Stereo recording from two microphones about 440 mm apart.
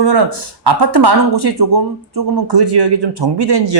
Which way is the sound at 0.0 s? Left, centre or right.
Right.